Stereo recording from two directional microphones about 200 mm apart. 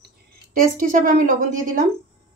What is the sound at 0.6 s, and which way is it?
Speech, 45° right (ahead or behind).